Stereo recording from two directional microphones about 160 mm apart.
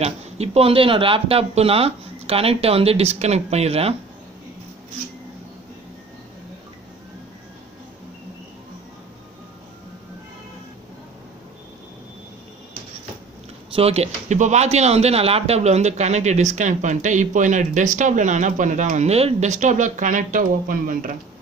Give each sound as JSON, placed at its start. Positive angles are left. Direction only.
{"t": 0.0, "sound": "speech", "side_deg": -40}
{"t": 13.7, "sound": "speech", "side_deg": -40}